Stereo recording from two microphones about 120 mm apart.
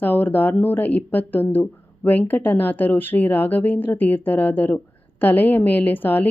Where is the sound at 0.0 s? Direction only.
15° left (ahead or behind).